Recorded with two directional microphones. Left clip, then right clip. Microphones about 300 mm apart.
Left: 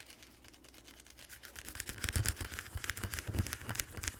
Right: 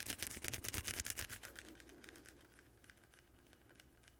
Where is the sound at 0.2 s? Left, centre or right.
Right.